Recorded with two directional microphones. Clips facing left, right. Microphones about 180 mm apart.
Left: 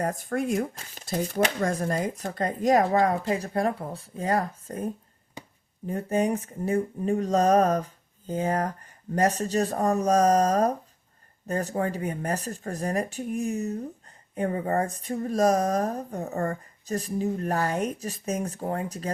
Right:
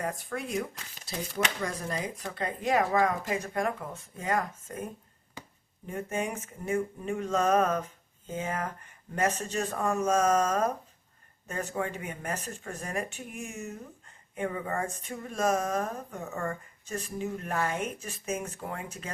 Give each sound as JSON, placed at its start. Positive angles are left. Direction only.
{"t": 0.0, "sound": "speech", "side_deg": 45}